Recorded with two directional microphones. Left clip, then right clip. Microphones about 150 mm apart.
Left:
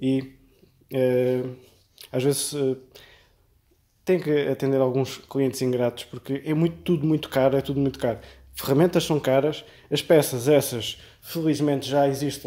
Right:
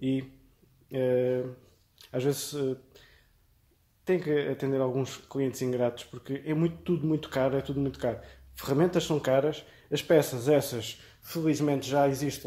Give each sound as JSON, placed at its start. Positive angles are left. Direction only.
{"t": 0.0, "sound": "speech", "side_deg": 30}